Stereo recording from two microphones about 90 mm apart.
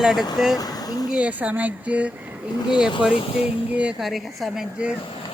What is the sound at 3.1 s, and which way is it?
Speech, 85° left.